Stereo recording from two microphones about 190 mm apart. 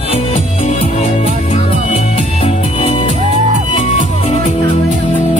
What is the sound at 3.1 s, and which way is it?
Music, 35° right (ahead or behind).